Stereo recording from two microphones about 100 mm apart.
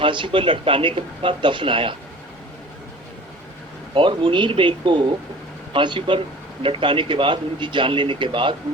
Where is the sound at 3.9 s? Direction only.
60° right (ahead or behind).